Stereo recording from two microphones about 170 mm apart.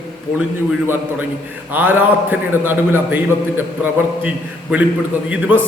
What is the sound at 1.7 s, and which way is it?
A man's voice, 10° right (ahead or behind).